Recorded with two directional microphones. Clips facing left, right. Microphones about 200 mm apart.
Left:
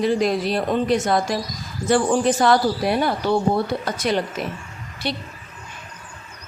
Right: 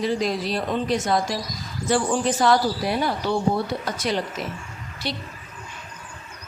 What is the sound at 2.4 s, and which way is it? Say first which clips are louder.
Speech: left 2 dB; 55° left (ahead or behind).